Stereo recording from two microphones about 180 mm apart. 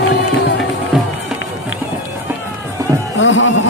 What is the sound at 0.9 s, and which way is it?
Music, 5° right (ahead or behind).